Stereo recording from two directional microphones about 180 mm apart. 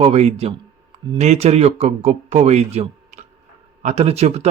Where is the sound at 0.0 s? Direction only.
35° right (ahead or behind).